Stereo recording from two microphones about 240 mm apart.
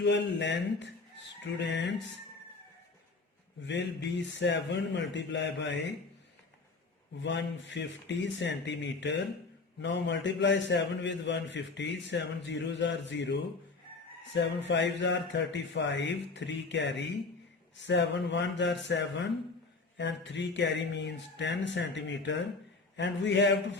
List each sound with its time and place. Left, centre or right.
0.0 s a man's voice: left
3.7 s a man's voice: left
7.2 s a man's voice: left